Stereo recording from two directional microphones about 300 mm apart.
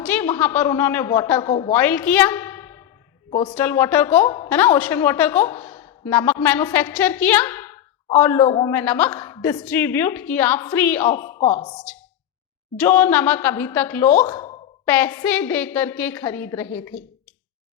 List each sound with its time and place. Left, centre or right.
0.0 s a woman's voice: centre